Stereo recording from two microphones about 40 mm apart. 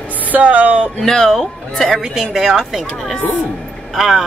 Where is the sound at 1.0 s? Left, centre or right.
Centre.